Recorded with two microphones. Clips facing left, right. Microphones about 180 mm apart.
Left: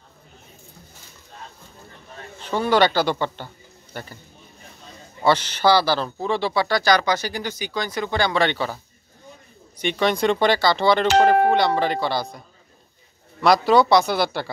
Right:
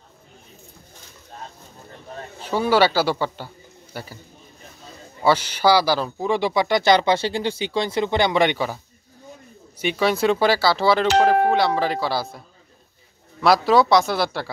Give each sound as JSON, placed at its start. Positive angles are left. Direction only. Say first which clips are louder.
{"t": 2.4, "sound": "a man's voice", "louder": "right 1 dB", "side_deg": -10}
{"t": 5.2, "sound": "speech", "louder": "even", "side_deg": -10}
{"t": 9.8, "sound": "speech", "louder": "right 1 dB", "side_deg": -5}